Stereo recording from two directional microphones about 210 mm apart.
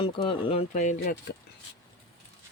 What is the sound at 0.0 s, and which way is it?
Speech, 25° left (ahead or behind).